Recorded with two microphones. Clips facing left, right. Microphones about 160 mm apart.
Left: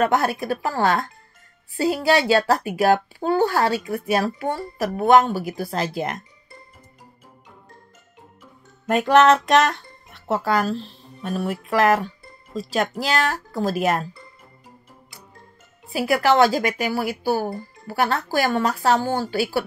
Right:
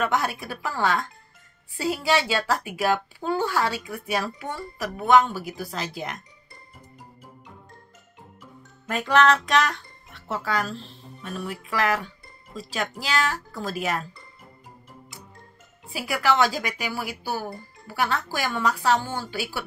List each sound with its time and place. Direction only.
0.0 s speech: 45° left (ahead or behind)
8.8 s speech: 50° left (ahead or behind)
15.9 s speech: 45° left (ahead or behind)